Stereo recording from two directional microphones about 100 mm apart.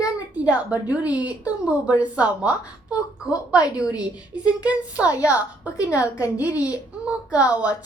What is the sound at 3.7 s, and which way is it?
A child's voice, 10° right (ahead or behind).